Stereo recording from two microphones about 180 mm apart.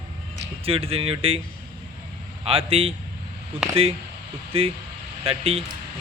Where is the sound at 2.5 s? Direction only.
30° right (ahead or behind).